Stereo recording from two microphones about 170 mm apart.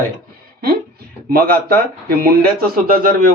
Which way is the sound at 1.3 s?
60° right (ahead or behind).